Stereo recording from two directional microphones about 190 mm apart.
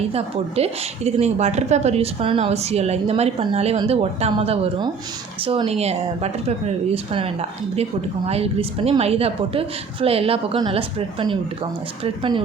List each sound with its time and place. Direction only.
0.1 s a woman's voice: 35° right (ahead or behind)